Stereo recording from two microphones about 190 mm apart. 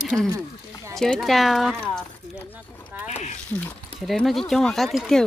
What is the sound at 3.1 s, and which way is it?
Speech, 35° left (ahead or behind).